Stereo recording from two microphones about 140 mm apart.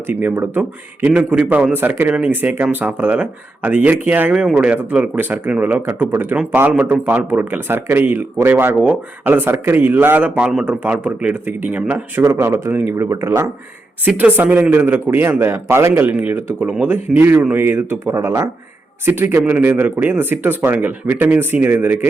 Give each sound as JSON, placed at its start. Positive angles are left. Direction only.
{"t": 0.1, "sound": "speech", "side_deg": -15}